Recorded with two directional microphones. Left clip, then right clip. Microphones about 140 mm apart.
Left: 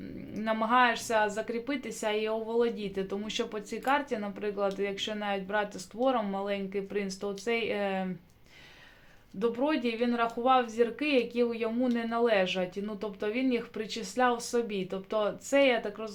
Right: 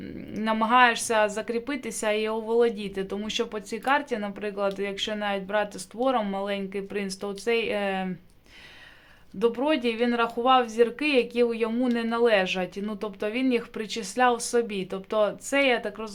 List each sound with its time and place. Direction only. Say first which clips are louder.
0.3 s a woman's voice: right 5 dB; 30° right (ahead or behind)
9.4 s a woman's voice: right 5 dB; 30° right (ahead or behind)